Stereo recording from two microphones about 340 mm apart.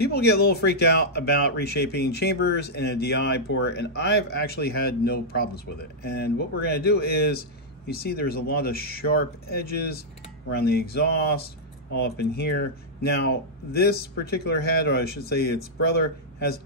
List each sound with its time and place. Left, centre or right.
0.0 s speech: left